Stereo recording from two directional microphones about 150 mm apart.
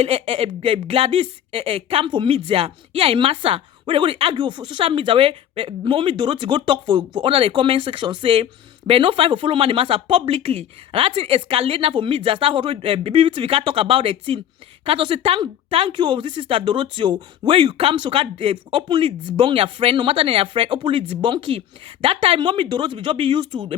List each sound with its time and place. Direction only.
0.0 s speech: 40° right (ahead or behind)